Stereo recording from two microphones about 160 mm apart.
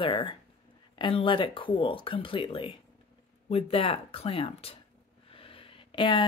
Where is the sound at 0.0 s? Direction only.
30° left (ahead or behind).